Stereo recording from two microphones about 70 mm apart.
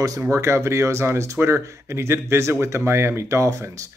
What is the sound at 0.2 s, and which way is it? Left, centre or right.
Speech, right.